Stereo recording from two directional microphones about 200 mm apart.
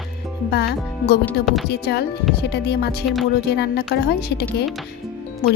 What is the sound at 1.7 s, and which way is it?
Speech, 55° left (ahead or behind).